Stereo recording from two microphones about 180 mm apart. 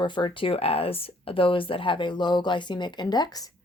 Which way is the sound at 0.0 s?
25° left (ahead or behind).